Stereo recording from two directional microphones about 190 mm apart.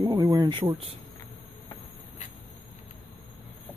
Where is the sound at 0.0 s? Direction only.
20° right (ahead or behind).